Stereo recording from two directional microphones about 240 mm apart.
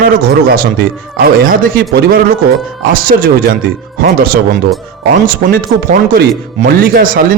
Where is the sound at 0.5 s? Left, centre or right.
Right.